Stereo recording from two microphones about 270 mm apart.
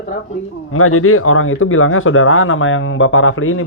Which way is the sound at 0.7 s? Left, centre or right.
Left.